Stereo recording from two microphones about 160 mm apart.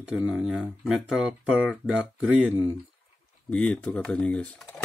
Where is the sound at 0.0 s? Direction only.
5° right (ahead or behind).